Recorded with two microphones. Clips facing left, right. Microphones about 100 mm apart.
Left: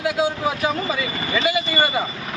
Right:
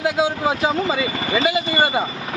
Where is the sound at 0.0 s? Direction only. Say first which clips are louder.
Right 2 dB; 25° right (ahead or behind).